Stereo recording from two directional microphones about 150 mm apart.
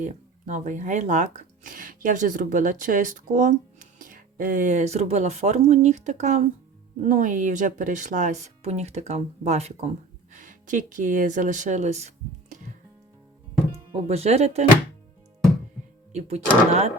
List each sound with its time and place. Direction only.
0.0 s speech: 55° right (ahead or behind)
10.3 s speech: 60° right (ahead or behind)
13.9 s speech: 45° right (ahead or behind)
16.1 s speech: 45° right (ahead or behind)